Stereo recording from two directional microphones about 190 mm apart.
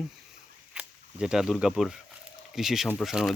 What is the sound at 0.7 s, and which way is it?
Speech, 5° right (ahead or behind).